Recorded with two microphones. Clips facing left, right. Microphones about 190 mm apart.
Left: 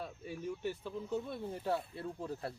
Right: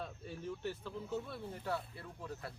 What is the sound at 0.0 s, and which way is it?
Speech, 15° left (ahead or behind).